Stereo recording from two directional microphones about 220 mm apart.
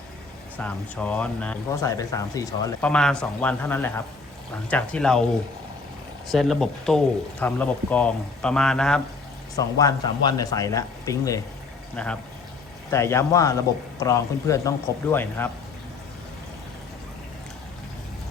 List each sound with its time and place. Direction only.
0.6 s speech: 5° left (ahead or behind)
2.9 s speech: 5° left (ahead or behind)
6.2 s speech: centre (ahead or behind)
9.6 s speech: 15° left (ahead or behind)
11.9 s speech: 5° left (ahead or behind)